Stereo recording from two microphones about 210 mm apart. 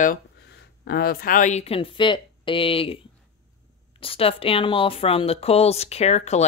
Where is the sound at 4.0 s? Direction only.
25° left (ahead or behind).